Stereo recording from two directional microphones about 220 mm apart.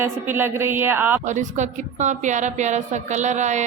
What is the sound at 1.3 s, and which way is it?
A woman's voice, 35° right (ahead or behind).